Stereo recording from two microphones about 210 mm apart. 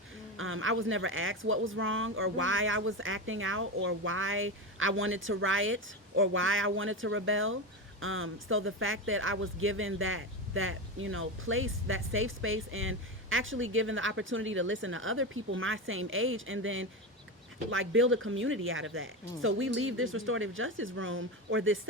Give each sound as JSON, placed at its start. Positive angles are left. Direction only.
{"t": 0.3, "sound": "speech", "side_deg": -75}